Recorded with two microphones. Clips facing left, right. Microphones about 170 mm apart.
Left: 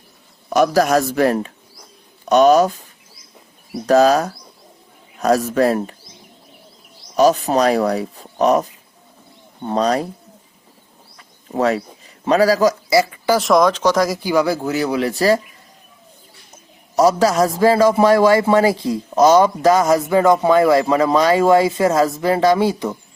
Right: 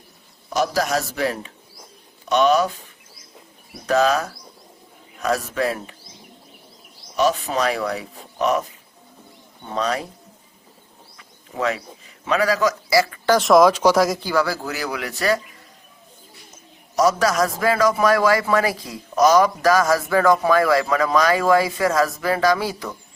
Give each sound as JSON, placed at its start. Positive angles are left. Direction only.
{"t": 0.5, "sound": "a man's voice", "side_deg": 55}
{"t": 3.8, "sound": "speech", "side_deg": 40}
{"t": 7.2, "sound": "speech", "side_deg": 40}
{"t": 9.6, "sound": "speech", "side_deg": 40}
{"t": 11.2, "sound": "bird", "side_deg": 35}
{"t": 12.2, "sound": "speech", "side_deg": 35}
{"t": 12.9, "sound": "a sound", "side_deg": 20}
{"t": 13.3, "sound": "speech", "side_deg": 0}
{"t": 14.2, "sound": "a man's voice", "side_deg": 15}
{"t": 17.0, "sound": "a man's voice", "side_deg": 30}